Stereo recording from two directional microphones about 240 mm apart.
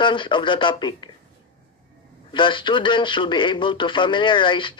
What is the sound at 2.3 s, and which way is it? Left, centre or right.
A man's voice, centre.